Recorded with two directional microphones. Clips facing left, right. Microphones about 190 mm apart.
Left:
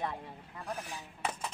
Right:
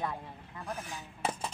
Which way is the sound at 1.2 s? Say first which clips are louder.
Right 3 dB; 30° right (ahead or behind).